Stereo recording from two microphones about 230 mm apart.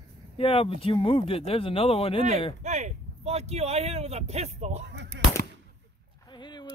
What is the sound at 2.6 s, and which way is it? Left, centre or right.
Speech, right.